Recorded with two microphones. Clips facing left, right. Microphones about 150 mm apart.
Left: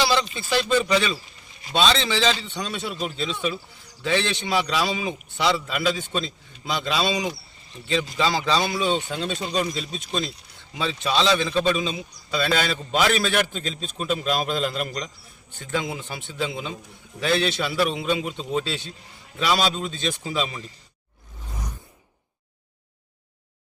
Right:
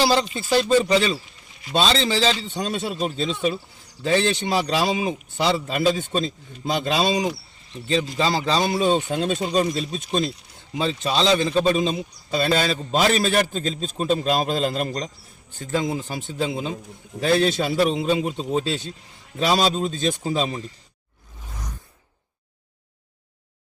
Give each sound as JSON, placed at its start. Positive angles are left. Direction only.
{"t": 0.0, "sound": "a man's voice", "side_deg": -40}